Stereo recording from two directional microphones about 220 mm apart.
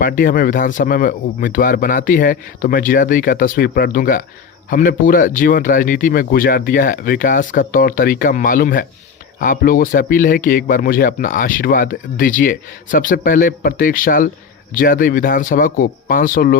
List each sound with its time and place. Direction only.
0.0 s speech: 40° left (ahead or behind)